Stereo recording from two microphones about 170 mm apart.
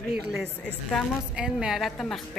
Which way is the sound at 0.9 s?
Centre (ahead or behind).